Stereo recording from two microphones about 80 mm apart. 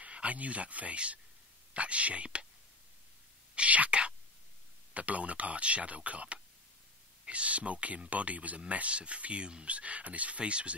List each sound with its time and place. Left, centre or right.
0.0 s speech: centre
3.5 s speech: centre